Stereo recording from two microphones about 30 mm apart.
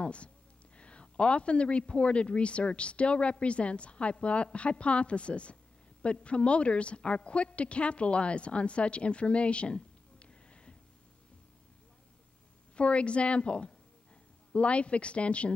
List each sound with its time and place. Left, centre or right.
0.0 s a man's voice: left
12.7 s a man's voice: left